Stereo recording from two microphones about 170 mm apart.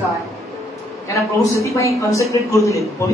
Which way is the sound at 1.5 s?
20° left (ahead or behind).